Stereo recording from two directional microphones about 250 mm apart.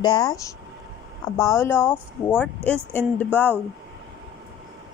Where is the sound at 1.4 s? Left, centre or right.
Centre.